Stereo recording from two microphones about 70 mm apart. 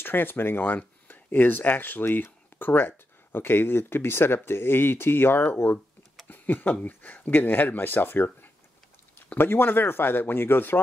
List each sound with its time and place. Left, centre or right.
0.0 s speech: left